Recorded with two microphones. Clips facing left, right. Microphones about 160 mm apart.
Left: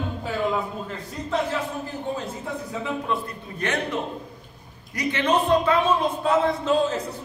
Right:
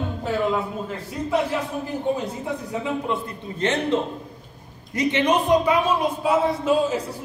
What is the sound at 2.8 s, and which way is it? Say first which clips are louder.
Speech: even; 25° right (ahead or behind).